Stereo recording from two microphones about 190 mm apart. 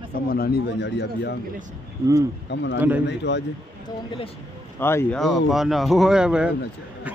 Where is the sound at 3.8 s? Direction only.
25° left (ahead or behind).